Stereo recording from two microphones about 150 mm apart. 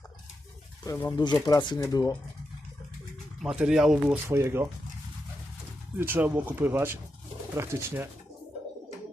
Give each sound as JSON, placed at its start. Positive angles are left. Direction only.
{"t": 0.9, "sound": "speech", "side_deg": 20}
{"t": 3.4, "sound": "speech", "side_deg": -5}
{"t": 4.3, "sound": "speech", "side_deg": -20}
{"t": 6.0, "sound": "speech", "side_deg": -15}